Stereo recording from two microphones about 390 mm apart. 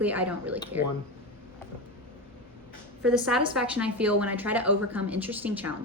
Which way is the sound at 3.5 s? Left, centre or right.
Centre.